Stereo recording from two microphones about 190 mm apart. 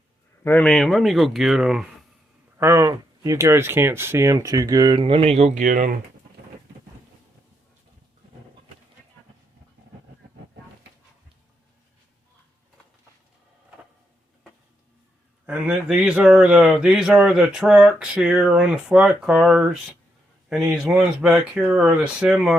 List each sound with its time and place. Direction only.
0.4 s speech: 10° left (ahead or behind)
2.6 s speech: 15° right (ahead or behind); by 5.9 s 40° right (ahead or behind)
15.4 s speech: 5° right (ahead or behind)